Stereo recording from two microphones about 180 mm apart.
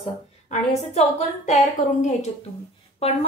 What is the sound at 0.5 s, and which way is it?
A woman's voice, 40° left (ahead or behind).